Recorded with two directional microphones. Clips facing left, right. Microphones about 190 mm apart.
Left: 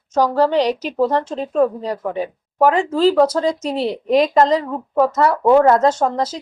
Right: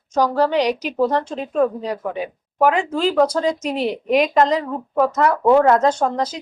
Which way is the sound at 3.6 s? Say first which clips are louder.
Left 1 dB; 35° left (ahead or behind).